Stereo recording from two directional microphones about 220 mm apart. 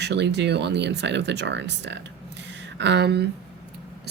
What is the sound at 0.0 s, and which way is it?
A woman's voice, 50° right (ahead or behind).